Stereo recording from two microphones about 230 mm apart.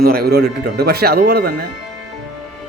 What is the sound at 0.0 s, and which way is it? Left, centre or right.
A man's voice, right.